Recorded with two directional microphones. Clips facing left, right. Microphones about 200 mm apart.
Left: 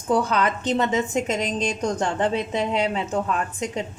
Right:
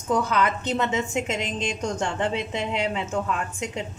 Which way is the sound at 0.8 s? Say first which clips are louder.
Left 3 dB; 40° left (ahead or behind).